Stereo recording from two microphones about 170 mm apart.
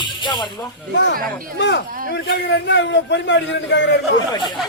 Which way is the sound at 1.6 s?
85° left.